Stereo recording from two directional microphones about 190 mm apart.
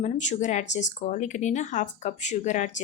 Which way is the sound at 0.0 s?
40° left (ahead or behind).